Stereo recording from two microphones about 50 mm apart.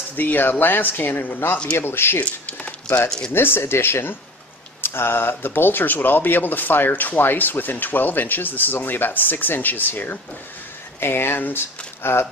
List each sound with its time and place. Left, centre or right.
0.1 s speech: left
1.8 s speech: left
2.1 s a sound: left
3.3 s speech: left
11.0 s speech: left